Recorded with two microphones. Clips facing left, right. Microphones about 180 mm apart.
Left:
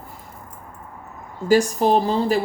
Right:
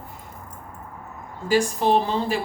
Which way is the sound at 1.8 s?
40° left (ahead or behind).